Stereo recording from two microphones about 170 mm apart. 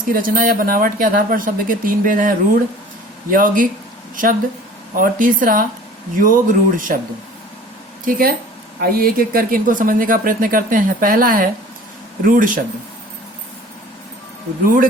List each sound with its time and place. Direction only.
0.0 s speech: 55° right (ahead or behind)
4.9 s speech: 55° right (ahead or behind)
8.0 s speech: 60° right (ahead or behind)
14.6 s speech: 55° right (ahead or behind)